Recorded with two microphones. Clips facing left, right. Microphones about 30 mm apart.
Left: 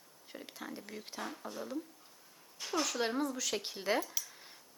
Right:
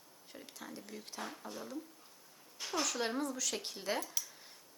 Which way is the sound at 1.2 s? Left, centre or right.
Centre.